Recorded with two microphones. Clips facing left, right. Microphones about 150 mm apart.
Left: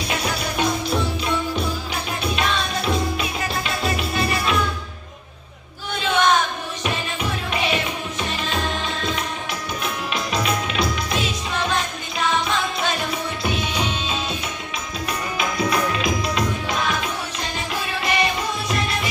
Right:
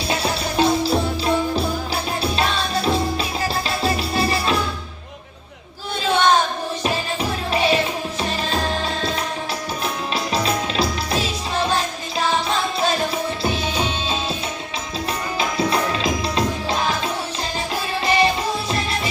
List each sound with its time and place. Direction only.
0.1 s music: 30° right (ahead or behind)
6.1 s a sound: 30° right (ahead or behind)
6.8 s music: 35° right (ahead or behind)
15.4 s music: 30° right (ahead or behind)